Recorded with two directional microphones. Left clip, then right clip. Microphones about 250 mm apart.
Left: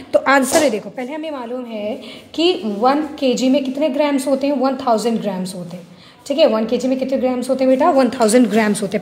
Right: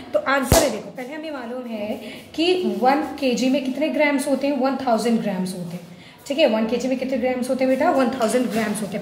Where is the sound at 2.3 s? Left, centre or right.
Left.